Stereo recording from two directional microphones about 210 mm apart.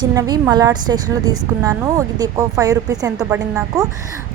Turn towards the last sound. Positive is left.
turn(degrees=-15)  # may be behind; listen again after turning